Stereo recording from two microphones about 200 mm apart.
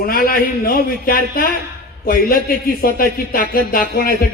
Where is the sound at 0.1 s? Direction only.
45° left (ahead or behind).